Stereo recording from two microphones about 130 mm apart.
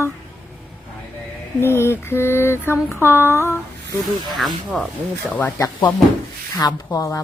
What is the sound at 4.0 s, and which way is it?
Speech, centre (ahead or behind).